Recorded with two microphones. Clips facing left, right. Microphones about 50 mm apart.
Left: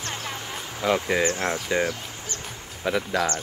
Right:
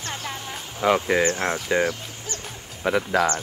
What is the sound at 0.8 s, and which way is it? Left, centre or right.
Speech, centre.